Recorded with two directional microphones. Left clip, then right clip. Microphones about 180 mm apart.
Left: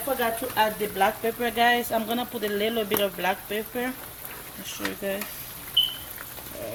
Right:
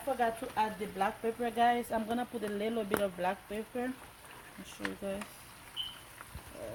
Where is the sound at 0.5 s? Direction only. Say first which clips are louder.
Left 9 dB; 40° right (ahead or behind).